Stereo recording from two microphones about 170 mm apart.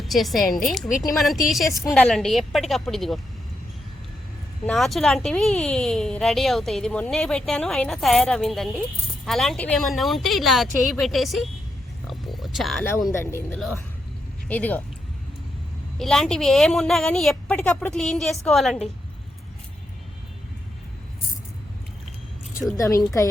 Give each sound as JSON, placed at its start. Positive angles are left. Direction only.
{"t": 0.0, "sound": "speech", "side_deg": 0}
{"t": 4.6, "sound": "speech", "side_deg": 0}
{"t": 12.0, "sound": "a sound", "side_deg": 0}
{"t": 13.1, "sound": "speech", "side_deg": 15}
{"t": 16.0, "sound": "speech", "side_deg": 0}
{"t": 22.8, "sound": "speech", "side_deg": 20}